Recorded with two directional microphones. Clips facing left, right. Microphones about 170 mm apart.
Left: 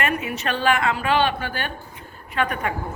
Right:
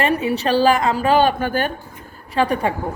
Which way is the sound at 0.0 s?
30° right (ahead or behind).